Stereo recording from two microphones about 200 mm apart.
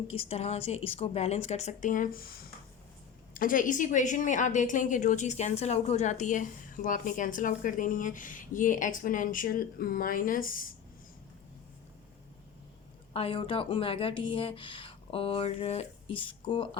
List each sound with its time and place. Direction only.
0.1 s a woman's voice: 30° left (ahead or behind)
3.3 s a woman's voice: 40° left (ahead or behind)
13.1 s speech: 25° left (ahead or behind)